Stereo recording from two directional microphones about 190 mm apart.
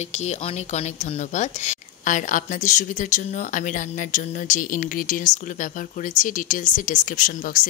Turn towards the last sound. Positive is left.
turn(degrees=45)  # may be behind; listen again after turning